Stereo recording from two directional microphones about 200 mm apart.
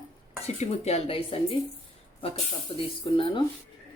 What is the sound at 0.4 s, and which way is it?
Speech, 30° left (ahead or behind).